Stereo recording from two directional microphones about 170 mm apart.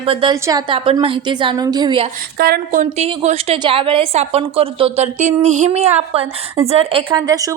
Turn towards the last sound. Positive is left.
turn(degrees=-20)  # may be behind; listen again after turning